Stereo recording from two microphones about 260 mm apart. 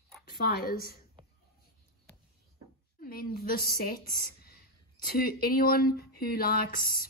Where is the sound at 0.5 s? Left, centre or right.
Left.